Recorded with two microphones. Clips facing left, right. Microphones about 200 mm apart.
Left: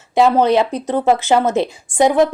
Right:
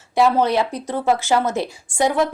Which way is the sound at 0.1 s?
20° left (ahead or behind).